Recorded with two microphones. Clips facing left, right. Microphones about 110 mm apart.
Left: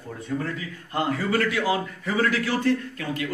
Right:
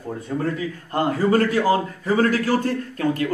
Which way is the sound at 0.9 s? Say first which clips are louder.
Right 5 dB; 40° right (ahead or behind).